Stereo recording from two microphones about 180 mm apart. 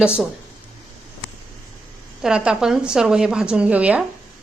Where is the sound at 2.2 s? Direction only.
5° right (ahead or behind).